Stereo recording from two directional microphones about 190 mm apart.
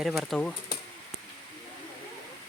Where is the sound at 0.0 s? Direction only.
Centre (ahead or behind).